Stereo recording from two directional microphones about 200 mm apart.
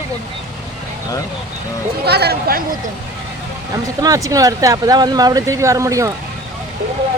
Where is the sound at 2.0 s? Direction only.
55° right (ahead or behind).